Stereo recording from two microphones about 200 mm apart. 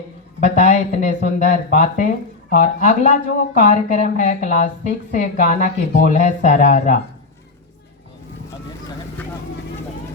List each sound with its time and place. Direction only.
0.3 s speech: 35° left (ahead or behind)